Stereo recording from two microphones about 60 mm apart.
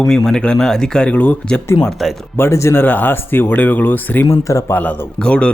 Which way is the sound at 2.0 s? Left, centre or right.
Centre.